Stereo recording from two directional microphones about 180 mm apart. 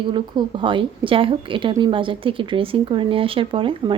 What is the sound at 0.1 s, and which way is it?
A woman's voice, 25° right (ahead or behind).